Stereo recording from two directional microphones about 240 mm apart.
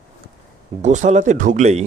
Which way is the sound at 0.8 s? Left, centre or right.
Right.